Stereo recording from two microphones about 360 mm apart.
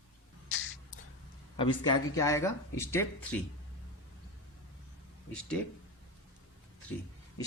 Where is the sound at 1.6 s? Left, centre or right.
Centre.